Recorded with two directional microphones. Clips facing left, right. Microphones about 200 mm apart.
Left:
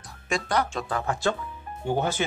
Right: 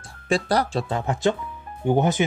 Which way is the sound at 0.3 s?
35° right (ahead or behind).